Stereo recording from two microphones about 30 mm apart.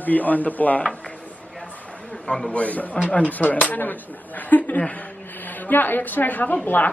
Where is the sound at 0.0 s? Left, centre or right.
Left.